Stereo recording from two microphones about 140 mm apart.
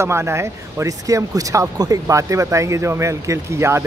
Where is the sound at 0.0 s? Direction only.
20° right (ahead or behind).